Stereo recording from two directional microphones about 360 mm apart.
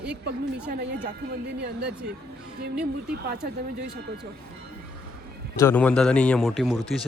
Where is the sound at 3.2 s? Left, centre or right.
Right.